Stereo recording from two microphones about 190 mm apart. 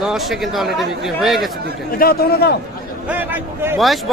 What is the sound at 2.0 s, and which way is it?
Speech, 55° left (ahead or behind).